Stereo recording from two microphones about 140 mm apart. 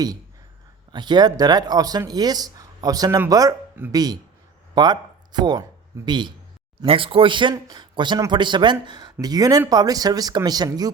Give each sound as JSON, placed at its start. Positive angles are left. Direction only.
{"t": 0.9, "sound": "a man's voice", "side_deg": -30}